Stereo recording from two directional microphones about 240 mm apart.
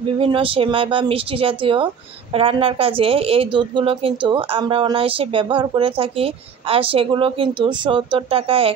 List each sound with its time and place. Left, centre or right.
0.0 s a woman's voice: right